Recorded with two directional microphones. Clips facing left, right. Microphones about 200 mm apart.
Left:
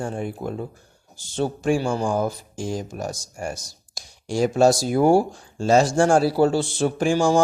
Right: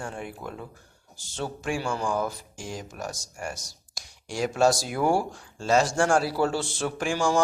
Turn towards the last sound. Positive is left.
turn(degrees=30)  # may be behind; listen again after turning